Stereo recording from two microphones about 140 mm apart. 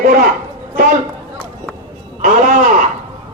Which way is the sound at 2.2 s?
70° right (ahead or behind).